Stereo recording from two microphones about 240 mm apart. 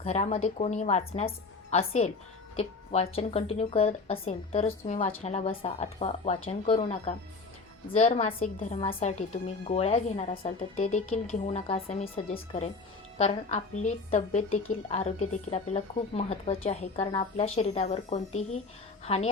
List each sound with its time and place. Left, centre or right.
0.0 s a woman's voice: left